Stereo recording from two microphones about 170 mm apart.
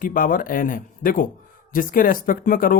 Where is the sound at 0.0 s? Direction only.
55° left (ahead or behind).